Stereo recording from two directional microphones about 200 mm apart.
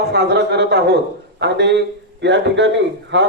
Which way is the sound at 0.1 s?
55° right (ahead or behind).